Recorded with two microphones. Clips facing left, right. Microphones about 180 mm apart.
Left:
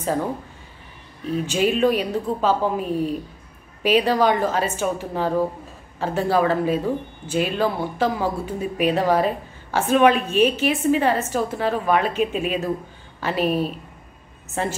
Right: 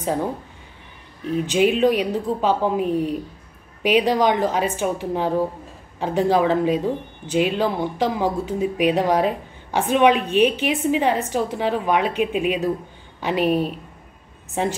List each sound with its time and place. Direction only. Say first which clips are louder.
1.3 s speech: right 2 dB; 15° right (ahead or behind)